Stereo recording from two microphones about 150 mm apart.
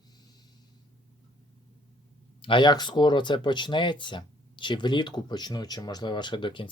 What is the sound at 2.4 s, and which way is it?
Speech, 30° left (ahead or behind).